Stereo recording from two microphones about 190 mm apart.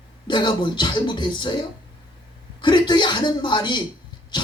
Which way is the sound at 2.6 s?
25° left (ahead or behind).